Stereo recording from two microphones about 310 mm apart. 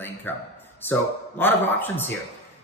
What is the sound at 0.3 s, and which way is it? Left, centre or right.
Speech, centre.